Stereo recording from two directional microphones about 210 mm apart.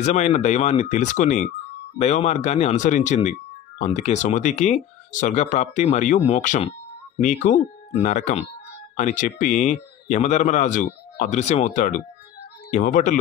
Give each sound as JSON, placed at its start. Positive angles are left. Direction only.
{"t": 0.0, "sound": "speech", "side_deg": 30}